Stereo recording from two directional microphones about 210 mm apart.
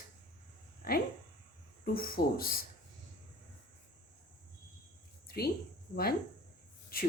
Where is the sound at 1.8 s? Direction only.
45° left (ahead or behind).